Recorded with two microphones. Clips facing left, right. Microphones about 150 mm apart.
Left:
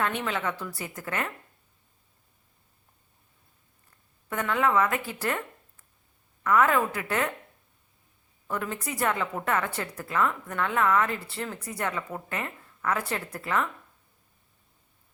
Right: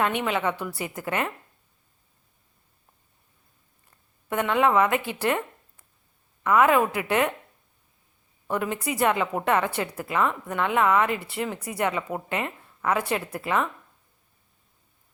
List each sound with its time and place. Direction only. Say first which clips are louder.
0.0 s a woman's voice: right 4 dB; 15° right (ahead or behind)
4.3 s a woman's voice: right 4 dB; 20° right (ahead or behind)
8.4 s a woman's voice: right 5 dB; 20° right (ahead or behind)